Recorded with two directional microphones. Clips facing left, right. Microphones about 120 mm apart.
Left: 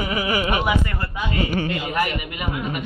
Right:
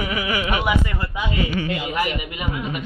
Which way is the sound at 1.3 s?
45° left (ahead or behind).